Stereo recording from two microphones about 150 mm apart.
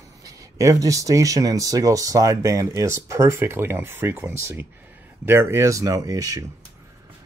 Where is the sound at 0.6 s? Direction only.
20° right (ahead or behind).